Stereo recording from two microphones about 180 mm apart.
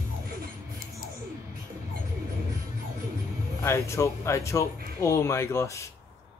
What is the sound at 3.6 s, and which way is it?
Speech, 15° left (ahead or behind).